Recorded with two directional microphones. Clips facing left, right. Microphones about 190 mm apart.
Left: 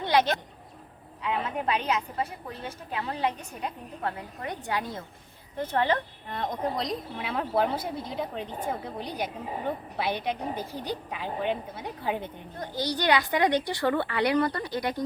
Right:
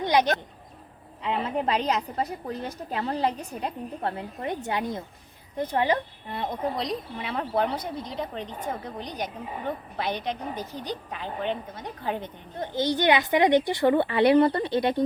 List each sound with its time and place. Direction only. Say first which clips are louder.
0.0 s speech: right 1 dB; 15° right (ahead or behind)
1.5 s a woman's voice: right 4 dB; 35° right (ahead or behind); by 12.3 s 10° left (ahead or behind)
12.5 s speech: right 5 dB; 20° right (ahead or behind)